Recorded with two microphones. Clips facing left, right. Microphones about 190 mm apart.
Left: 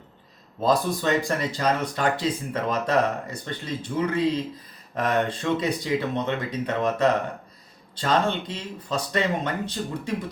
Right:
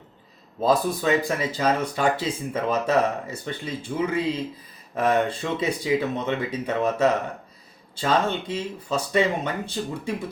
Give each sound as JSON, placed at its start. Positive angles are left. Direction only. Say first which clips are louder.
{"t": 0.6, "sound": "speech", "louder": "right 1 dB", "side_deg": -5}